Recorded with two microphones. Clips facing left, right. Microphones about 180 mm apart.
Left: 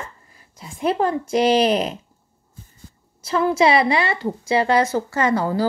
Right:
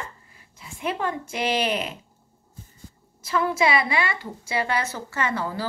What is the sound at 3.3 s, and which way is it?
Speech, 30° left (ahead or behind).